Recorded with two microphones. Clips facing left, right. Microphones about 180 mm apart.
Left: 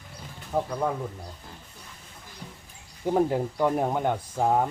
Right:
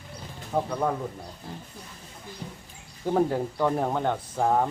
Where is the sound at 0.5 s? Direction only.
5° left (ahead or behind).